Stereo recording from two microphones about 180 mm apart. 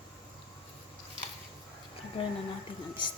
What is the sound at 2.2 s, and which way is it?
Speech, 30° left (ahead or behind).